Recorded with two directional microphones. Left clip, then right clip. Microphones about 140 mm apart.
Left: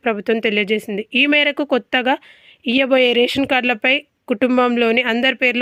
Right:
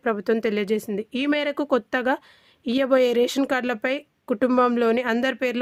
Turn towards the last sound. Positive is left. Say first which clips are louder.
# left 7 dB
turn(degrees=15)  # may be behind; listen again after turning